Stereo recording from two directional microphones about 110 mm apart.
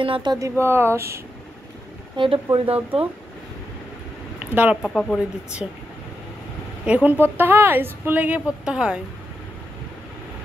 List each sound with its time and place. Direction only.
0.0 s speech: 50° right (ahead or behind)
0.3 s speech: 25° right (ahead or behind)
2.1 s speech: 55° right (ahead or behind)
4.4 s speech: 15° right (ahead or behind)
4.8 s speech: 5° left (ahead or behind)
6.9 s speech: 15° right (ahead or behind)